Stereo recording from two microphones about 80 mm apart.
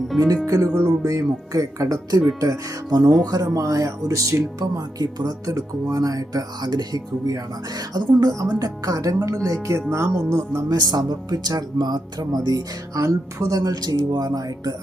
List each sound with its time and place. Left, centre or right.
0.4 s speech: right
10.9 s speech: right